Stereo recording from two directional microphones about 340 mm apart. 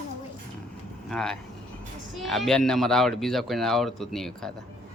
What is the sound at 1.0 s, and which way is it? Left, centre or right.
Speech, centre.